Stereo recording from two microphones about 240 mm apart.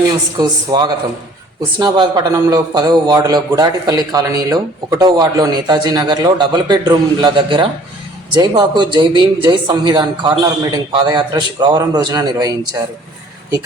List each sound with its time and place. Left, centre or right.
0.1 s a man's voice: centre